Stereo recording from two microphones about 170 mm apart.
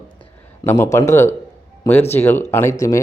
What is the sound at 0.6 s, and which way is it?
Speech, 15° left (ahead or behind).